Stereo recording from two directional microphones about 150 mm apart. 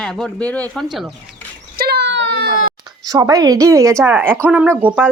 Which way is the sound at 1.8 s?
90° right.